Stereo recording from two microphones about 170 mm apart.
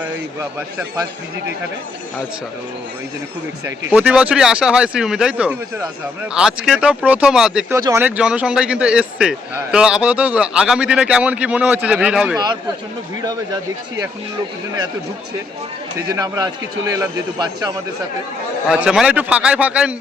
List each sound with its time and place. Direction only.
3.9 s a man's voice: 5° right (ahead or behind)
7.7 s a man's voice: 15° right (ahead or behind)
13.2 s a man's voice: 20° right (ahead or behind)
16.1 s a man's voice: 20° right (ahead or behind)
18.7 s a man's voice: 5° right (ahead or behind)